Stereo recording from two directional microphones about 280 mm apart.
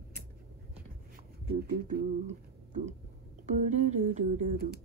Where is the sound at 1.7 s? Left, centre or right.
Right.